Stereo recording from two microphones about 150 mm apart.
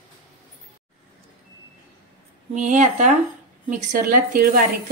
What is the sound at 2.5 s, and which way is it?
A woman's voice, 55° right (ahead or behind).